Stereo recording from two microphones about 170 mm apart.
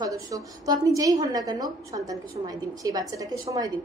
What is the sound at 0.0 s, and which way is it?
A woman's voice, 20° right (ahead or behind).